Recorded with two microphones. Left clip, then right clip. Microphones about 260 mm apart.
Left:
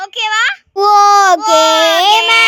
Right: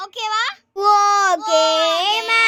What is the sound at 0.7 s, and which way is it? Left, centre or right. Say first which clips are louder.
Speech: left 7 dB; centre.